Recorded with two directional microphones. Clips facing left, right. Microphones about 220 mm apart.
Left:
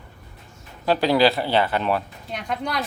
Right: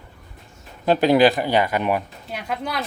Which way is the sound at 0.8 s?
20° right (ahead or behind).